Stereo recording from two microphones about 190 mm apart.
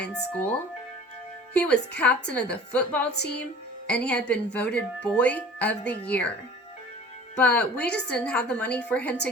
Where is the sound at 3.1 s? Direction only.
60° left (ahead or behind).